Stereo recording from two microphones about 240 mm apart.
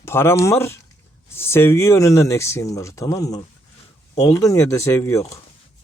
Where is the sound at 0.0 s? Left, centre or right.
Centre.